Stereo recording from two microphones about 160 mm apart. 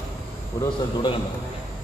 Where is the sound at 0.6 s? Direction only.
30° left (ahead or behind).